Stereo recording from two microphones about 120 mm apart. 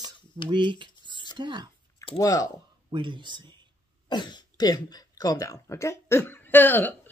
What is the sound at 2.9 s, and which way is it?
Speech, 40° right (ahead or behind).